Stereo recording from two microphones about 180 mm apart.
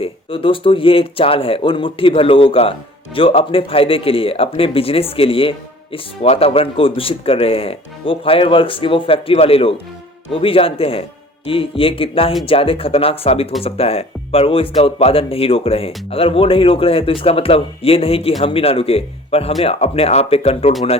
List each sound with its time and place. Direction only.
0.0 s speech: 30° left (ahead or behind)